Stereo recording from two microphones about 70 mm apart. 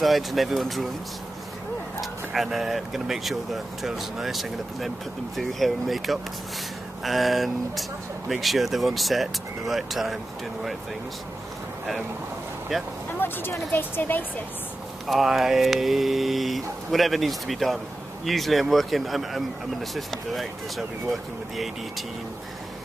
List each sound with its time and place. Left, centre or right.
0.0 s speech: centre
2.0 s speech: centre
12.7 s speech: centre
13.2 s speech: left
15.0 s speech: centre